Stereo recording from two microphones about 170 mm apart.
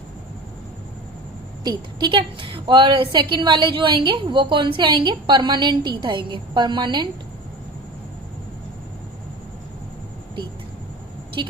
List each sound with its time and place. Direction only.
2.0 s a woman's voice: 30° right (ahead or behind)
11.4 s a woman's voice: 30° right (ahead or behind)